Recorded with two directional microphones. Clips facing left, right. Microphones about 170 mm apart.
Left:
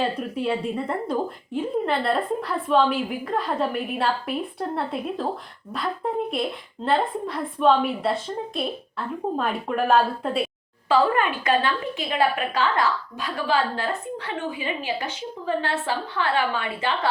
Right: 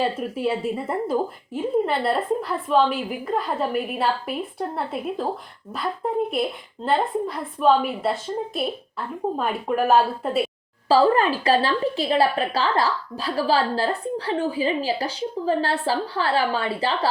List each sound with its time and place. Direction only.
0.0 s a woman's voice: 5° right (ahead or behind)
10.8 s a woman's voice: 35° right (ahead or behind)